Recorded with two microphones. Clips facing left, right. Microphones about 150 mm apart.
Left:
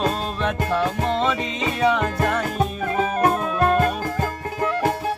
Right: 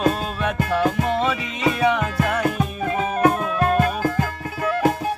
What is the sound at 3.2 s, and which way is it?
Music, 35° left (ahead or behind).